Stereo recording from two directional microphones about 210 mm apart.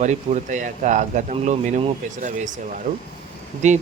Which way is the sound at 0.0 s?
35° right (ahead or behind).